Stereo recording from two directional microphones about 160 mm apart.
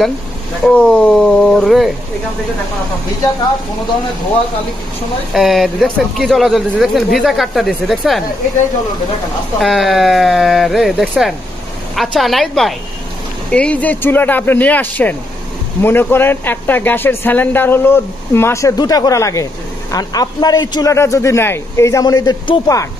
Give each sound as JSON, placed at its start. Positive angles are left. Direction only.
{"t": 0.7, "sound": "a sound", "side_deg": 5}
{"t": 5.3, "sound": "speech", "side_deg": 0}
{"t": 9.6, "sound": "a man's voice", "side_deg": 0}